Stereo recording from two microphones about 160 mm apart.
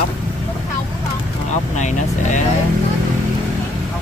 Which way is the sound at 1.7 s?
50° left (ahead or behind).